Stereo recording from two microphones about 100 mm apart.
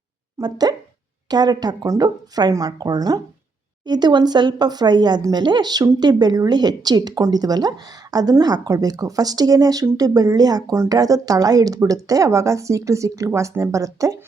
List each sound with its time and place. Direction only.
0.4 s a woman's voice: 40° right (ahead or behind)